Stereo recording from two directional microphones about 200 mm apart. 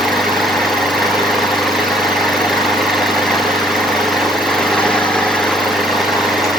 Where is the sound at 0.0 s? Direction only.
Centre (ahead or behind).